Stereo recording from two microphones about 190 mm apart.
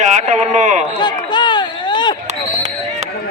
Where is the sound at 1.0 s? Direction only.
25° left (ahead or behind).